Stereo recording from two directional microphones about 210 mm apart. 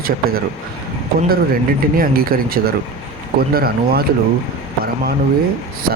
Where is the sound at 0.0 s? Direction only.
45° right (ahead or behind).